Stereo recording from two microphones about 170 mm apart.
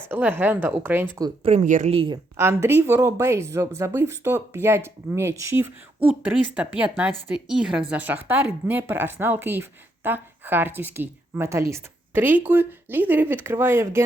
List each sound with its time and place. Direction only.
0.1 s a woman's voice: 10° right (ahead or behind)
1.5 s speech: 45° right (ahead or behind)
2.3 s a woman's voice: 15° right (ahead or behind)